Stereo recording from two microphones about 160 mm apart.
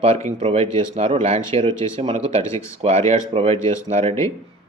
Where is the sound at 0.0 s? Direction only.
45° right (ahead or behind).